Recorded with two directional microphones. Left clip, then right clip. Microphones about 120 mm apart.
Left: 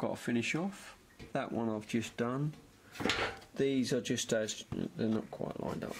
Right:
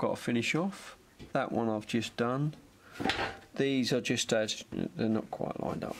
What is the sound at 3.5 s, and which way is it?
Speech, 25° right (ahead or behind).